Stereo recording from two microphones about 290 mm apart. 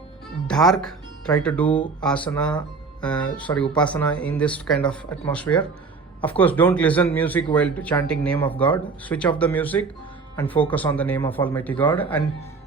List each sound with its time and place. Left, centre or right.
0.4 s speech: centre